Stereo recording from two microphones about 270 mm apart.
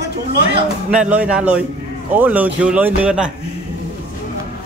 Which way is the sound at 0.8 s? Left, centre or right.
Centre.